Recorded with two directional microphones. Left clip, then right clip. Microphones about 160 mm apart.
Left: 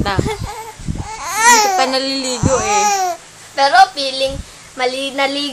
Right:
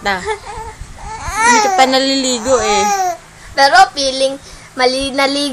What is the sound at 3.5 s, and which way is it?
Child singing, 40° right (ahead or behind).